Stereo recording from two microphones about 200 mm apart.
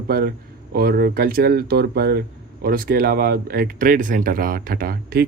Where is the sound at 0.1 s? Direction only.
50° right (ahead or behind).